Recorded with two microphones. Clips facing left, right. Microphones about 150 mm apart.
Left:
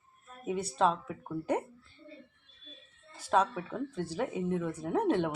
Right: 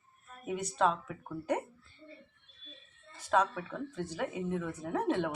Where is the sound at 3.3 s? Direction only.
25° left (ahead or behind).